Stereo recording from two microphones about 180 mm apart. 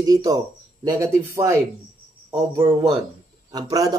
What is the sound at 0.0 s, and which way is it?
A man's voice, 20° right (ahead or behind).